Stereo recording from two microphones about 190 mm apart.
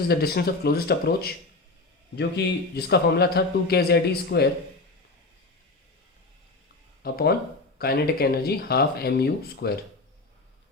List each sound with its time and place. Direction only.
0.1 s a man's voice: 55° left (ahead or behind)
7.0 s a man's voice: 55° left (ahead or behind)